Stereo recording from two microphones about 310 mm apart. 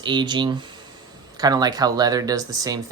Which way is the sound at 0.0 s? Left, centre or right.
Centre.